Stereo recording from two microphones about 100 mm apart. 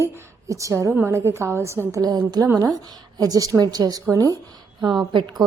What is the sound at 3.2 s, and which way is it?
A woman's voice, 40° right (ahead or behind).